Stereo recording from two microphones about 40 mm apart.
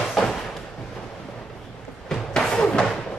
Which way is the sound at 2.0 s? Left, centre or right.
Centre.